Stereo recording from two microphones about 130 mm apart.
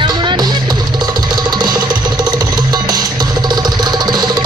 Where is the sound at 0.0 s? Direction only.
35° right (ahead or behind).